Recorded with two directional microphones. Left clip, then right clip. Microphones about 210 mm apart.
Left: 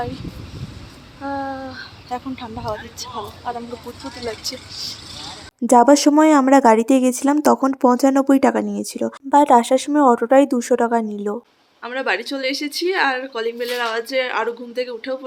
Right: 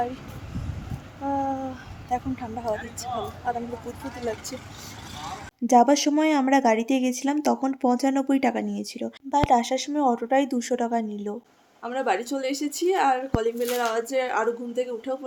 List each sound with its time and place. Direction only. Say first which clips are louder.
1.2 s a woman's voice: left 1 dB; 5° left (ahead or behind)
5.6 s speech: left 6 dB; 20° left (ahead or behind)
7.6 s speech: left 8 dB; 10° left (ahead or behind)
11.8 s a woman's voice: left 4 dB; centre (ahead or behind)